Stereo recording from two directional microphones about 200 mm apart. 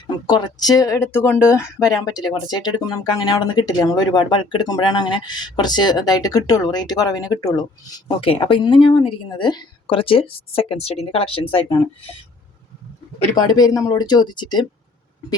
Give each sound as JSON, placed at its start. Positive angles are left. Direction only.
{"t": 0.3, "sound": "speech", "side_deg": 20}
{"t": 13.6, "sound": "speech", "side_deg": 20}